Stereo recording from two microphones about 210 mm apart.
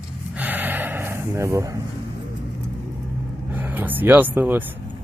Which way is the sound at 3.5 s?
10° right (ahead or behind).